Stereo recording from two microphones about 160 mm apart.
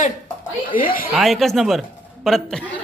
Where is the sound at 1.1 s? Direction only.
Centre (ahead or behind).